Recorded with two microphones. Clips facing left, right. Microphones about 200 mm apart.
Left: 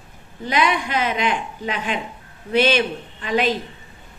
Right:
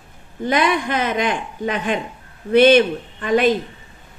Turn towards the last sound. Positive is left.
turn(degrees=-50)  # may be behind; listen again after turning